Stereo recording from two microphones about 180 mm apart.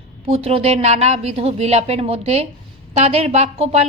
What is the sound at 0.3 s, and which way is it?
A woman's voice, 35° right (ahead or behind).